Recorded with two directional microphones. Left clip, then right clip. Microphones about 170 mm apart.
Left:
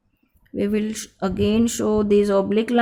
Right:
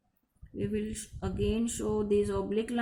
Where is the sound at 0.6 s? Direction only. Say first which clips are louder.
Left 11 dB; 55° left (ahead or behind).